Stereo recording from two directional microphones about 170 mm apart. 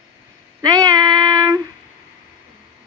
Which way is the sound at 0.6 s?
20° right (ahead or behind).